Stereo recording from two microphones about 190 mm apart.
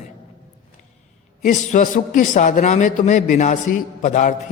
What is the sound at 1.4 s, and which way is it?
A man's voice, 40° left (ahead or behind).